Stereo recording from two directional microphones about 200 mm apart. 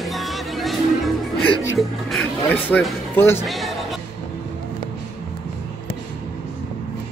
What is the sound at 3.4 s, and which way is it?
Music, centre (ahead or behind).